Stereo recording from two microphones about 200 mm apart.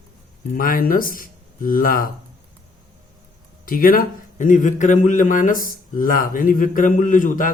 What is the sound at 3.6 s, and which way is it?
A man's voice, 45° left (ahead or behind).